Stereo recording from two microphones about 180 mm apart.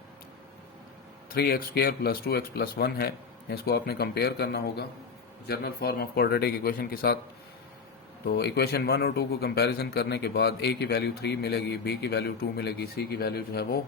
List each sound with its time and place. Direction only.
1.3 s speech: 55° left (ahead or behind)
8.3 s speech: 65° left (ahead or behind)